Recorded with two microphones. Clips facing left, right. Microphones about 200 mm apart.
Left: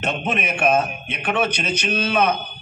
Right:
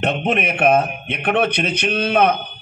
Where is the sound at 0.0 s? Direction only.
60° right (ahead or behind).